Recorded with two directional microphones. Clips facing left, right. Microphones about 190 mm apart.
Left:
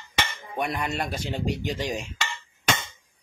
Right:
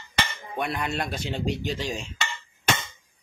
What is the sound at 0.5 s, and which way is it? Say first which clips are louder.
Speech: even; 10° left (ahead or behind).